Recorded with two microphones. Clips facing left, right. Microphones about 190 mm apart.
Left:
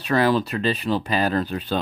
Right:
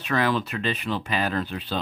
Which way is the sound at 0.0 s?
35° left (ahead or behind).